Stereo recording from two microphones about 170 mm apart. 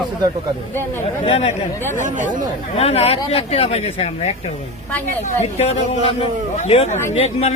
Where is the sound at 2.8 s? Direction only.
35° left (ahead or behind).